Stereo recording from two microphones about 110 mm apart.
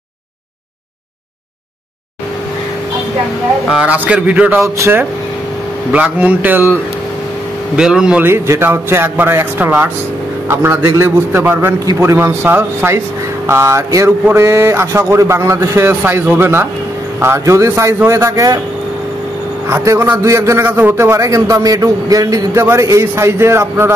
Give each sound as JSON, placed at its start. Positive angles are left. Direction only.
{"t": 3.7, "sound": "speech", "side_deg": -10}
{"t": 4.6, "sound": "a man's voice", "side_deg": -25}
{"t": 5.9, "sound": "speech", "side_deg": -15}
{"t": 7.7, "sound": "speech", "side_deg": -5}
{"t": 8.2, "sound": "a man's voice", "side_deg": -20}
{"t": 11.8, "sound": "a man's voice", "side_deg": -30}
{"t": 19.7, "sound": "a man's voice", "side_deg": -25}